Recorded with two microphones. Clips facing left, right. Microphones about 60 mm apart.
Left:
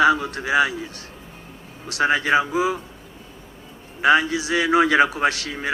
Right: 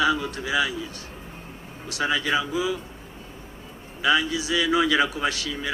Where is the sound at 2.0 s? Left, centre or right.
Left.